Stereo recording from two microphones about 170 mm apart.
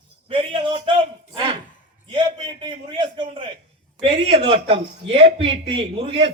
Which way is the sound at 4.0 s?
30° right (ahead or behind).